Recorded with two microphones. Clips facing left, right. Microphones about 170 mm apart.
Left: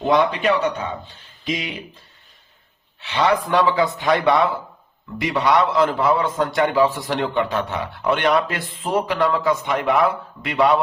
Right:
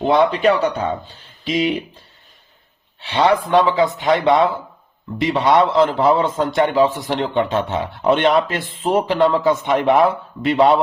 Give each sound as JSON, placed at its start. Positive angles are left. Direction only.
{"t": 0.0, "sound": "a man's voice", "side_deg": -30}
{"t": 3.0, "sound": "a man's voice", "side_deg": -30}